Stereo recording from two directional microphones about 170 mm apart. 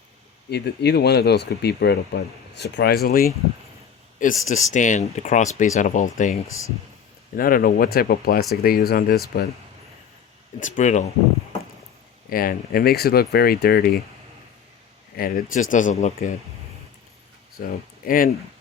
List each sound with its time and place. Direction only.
0.5 s speech: 75° left (ahead or behind)
4.2 s speech: 50° left (ahead or behind); by 9.5 s 65° left (ahead or behind)
10.6 s speech: 45° left (ahead or behind)
12.3 s speech: 60° left (ahead or behind)
15.1 s speech: 55° left (ahead or behind)
17.6 s speech: 55° left (ahead or behind)